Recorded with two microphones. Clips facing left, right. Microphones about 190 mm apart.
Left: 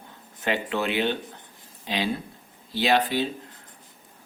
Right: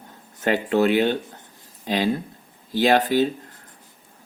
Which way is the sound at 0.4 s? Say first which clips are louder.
Right 7 dB; 40° right (ahead or behind).